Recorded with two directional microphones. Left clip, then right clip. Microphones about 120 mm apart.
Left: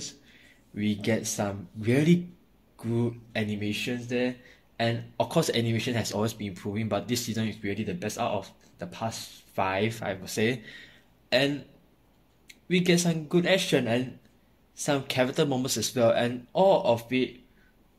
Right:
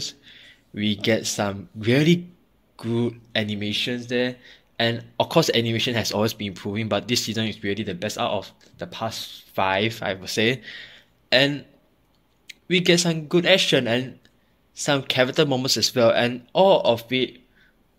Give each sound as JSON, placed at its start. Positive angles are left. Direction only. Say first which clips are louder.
{"t": 0.2, "sound": "speech", "louder": "right 8 dB", "side_deg": -55}